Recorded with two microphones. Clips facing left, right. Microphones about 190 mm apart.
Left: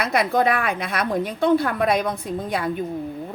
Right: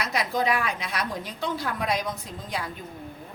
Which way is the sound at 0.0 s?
55° left (ahead or behind).